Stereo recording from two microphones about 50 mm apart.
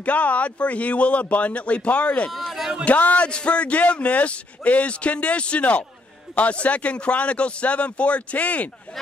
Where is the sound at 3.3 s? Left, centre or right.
Left.